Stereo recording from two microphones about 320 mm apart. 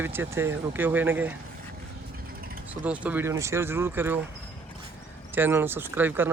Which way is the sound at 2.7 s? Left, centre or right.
Centre.